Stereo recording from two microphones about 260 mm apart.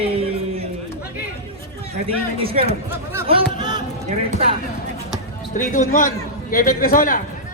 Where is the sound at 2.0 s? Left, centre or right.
Right.